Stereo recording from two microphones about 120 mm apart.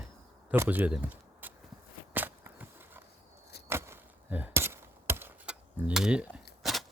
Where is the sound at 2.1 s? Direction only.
15° right (ahead or behind).